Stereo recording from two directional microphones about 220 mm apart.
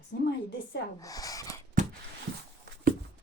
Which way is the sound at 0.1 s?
50° left (ahead or behind).